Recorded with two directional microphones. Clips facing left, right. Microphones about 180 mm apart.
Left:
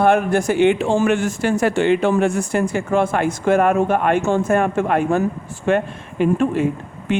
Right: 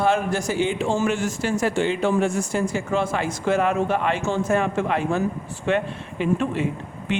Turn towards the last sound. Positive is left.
turn(degrees=50)  # may be behind; listen again after turning